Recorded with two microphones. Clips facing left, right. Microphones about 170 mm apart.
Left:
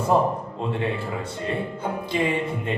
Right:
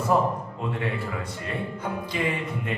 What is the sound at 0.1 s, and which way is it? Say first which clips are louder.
Music: left 2 dB; 25° left (ahead or behind).